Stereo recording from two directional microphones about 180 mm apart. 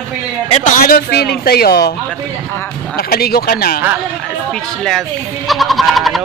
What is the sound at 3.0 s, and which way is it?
Speech, 60° left (ahead or behind).